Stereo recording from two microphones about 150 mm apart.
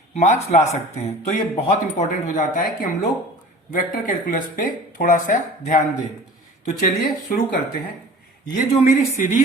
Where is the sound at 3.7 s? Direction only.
65° left (ahead or behind).